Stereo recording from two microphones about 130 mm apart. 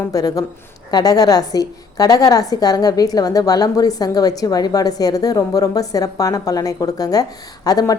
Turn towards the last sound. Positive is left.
turn(degrees=30)  # may be behind; listen again after turning